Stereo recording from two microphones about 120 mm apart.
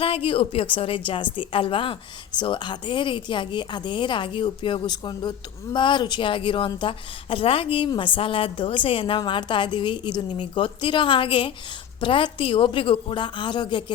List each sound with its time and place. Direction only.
0.0 s a woman's voice: 50° left (ahead or behind)